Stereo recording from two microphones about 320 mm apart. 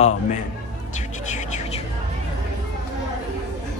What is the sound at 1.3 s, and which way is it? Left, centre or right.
Music, left.